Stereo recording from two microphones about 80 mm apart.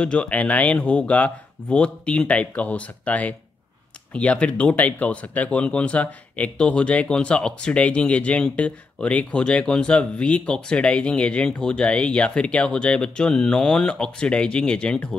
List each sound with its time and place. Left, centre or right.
0.0 s speech: centre